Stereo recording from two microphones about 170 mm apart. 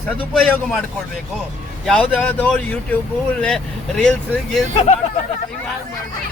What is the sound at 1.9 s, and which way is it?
A man's voice, 5° left (ahead or behind).